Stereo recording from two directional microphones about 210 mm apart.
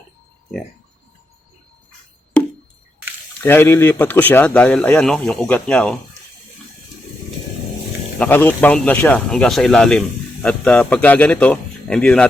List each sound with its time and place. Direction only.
2.3 s a sound: 5° left (ahead or behind)
3.4 s speech: 10° left (ahead or behind)
8.2 s speech: 10° left (ahead or behind)